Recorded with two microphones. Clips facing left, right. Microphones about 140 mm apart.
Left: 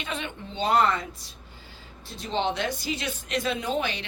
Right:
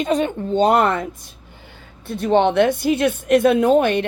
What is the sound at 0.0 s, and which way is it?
Speech, 40° right (ahead or behind).